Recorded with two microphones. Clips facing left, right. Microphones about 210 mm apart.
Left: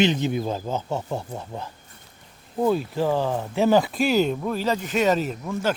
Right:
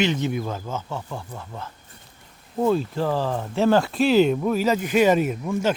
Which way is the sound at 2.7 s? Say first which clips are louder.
Even; 5° left (ahead or behind).